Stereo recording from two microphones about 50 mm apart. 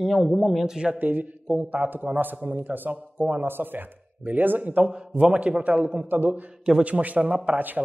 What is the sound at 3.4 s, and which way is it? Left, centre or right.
A man's voice, right.